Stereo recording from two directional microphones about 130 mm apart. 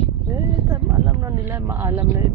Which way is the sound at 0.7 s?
25° right (ahead or behind).